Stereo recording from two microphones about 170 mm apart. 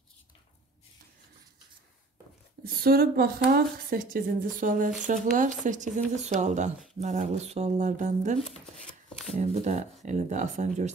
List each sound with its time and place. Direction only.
2.6 s a woman's voice: 60° right (ahead or behind); by 10.9 s 45° right (ahead or behind)